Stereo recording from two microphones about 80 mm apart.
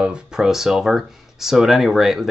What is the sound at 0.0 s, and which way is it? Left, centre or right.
Speech, centre.